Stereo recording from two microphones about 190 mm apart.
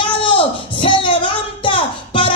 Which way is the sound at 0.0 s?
25° left (ahead or behind).